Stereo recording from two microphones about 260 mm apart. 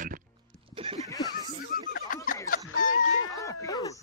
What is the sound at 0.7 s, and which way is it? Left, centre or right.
Snicker, right.